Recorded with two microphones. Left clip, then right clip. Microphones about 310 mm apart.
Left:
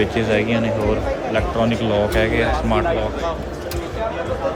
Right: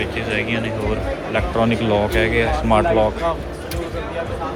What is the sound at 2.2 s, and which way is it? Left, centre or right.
Speech, left.